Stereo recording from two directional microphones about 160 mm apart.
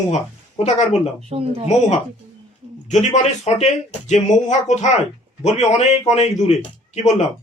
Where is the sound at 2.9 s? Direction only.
45° left (ahead or behind).